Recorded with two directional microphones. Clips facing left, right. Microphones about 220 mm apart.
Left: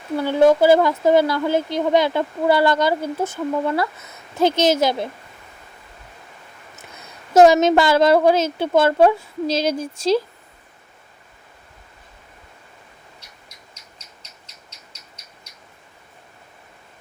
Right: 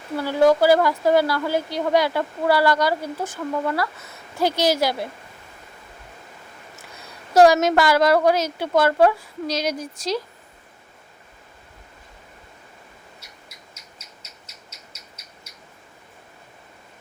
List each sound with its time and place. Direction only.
0.2 s speech: 25° left (ahead or behind)
6.7 s speech: 20° left (ahead or behind)